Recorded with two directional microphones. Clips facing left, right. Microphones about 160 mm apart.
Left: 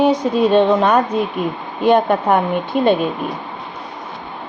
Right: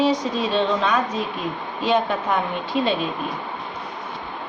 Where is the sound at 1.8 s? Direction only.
55° left (ahead or behind).